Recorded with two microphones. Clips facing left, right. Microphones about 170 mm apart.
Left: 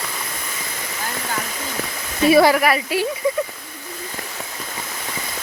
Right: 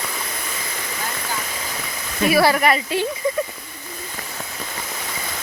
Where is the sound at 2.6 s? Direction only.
5° left (ahead or behind).